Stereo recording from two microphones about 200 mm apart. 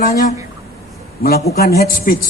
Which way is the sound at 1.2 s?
50° left (ahead or behind).